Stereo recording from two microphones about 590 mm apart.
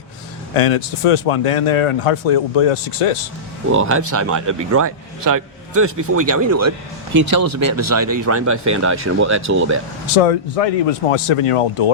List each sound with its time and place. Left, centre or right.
0.5 s speech: left
3.7 s speech: right
10.2 s speech: left